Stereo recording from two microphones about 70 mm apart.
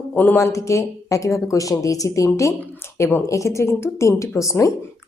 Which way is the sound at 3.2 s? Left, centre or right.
Left.